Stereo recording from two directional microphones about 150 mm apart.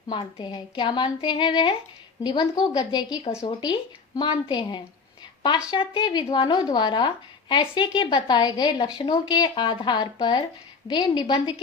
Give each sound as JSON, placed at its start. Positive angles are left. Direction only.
{"t": 0.1, "sound": "a woman's voice", "side_deg": 30}